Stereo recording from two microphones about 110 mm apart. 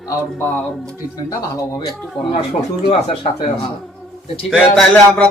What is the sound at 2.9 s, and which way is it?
Speech, 70° left (ahead or behind).